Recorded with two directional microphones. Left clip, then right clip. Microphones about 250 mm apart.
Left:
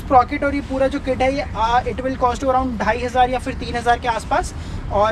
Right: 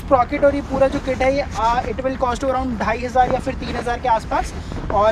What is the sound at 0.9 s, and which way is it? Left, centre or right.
Speech, centre.